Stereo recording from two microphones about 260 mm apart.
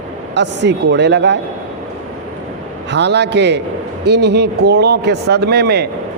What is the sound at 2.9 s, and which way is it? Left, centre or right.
Speech, right.